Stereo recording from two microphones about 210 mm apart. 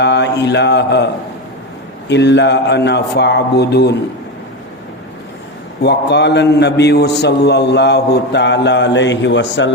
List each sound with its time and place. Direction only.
0.0 s a man's voice: 55° left (ahead or behind)
2.0 s a man's voice: 55° left (ahead or behind)
5.8 s a man's voice: 55° left (ahead or behind)